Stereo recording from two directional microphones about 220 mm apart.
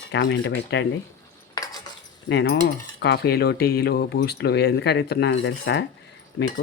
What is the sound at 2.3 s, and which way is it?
Speech, 50° left (ahead or behind).